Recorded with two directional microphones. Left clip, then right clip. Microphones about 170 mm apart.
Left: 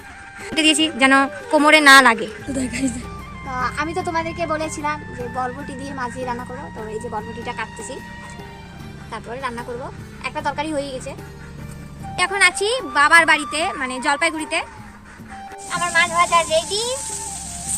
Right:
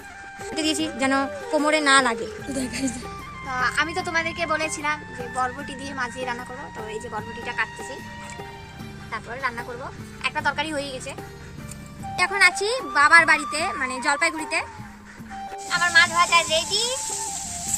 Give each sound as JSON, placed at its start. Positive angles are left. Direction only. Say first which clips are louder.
{"t": 0.4, "sound": "a woman's voice", "louder": "left 8 dB", "side_deg": -5}
{"t": 9.1, "sound": "speech", "louder": "left 1 dB", "side_deg": 25}
{"t": 9.6, "sound": "a woman's voice", "louder": "left 4 dB", "side_deg": 0}
{"t": 12.1, "sound": "a woman's voice", "louder": "left 2 dB", "side_deg": -5}
{"t": 15.7, "sound": "a woman's voice", "louder": "even", "side_deg": 0}